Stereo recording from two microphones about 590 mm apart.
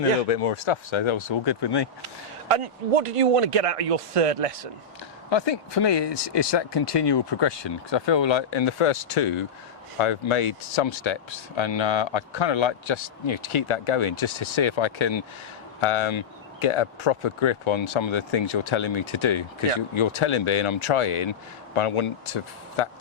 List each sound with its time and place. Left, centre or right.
0.3 s speech: left
2.5 s speech: right
5.3 s speech: left